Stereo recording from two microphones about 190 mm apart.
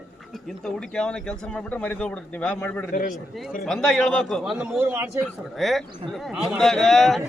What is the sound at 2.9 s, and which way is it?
Speech, 45° left (ahead or behind).